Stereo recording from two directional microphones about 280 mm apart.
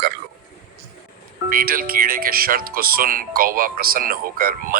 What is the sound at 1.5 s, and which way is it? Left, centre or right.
Speech, right.